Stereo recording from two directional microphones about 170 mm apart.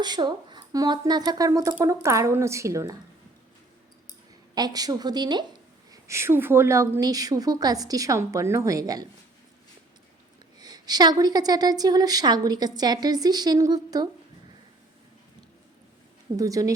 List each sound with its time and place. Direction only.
0.0 s a woman's voice: 25° right (ahead or behind)
4.5 s a woman's voice: 20° right (ahead or behind)
10.6 s a woman's voice: 25° right (ahead or behind)
16.4 s a woman's voice: 20° right (ahead or behind)